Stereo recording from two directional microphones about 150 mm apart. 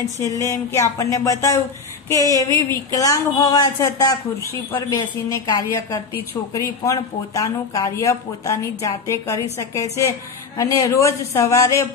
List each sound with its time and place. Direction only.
0.2 s speech: 20° left (ahead or behind)
2.2 s speech: 25° right (ahead or behind)
2.9 s speech: 25° left (ahead or behind)